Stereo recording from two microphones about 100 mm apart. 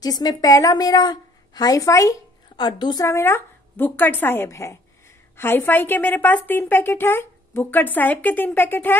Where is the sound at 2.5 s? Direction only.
55° left (ahead or behind).